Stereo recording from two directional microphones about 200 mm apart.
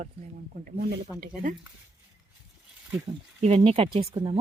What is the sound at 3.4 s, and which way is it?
Speech, 30° right (ahead or behind).